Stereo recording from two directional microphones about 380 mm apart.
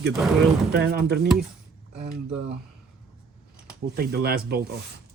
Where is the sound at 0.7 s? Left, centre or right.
Right.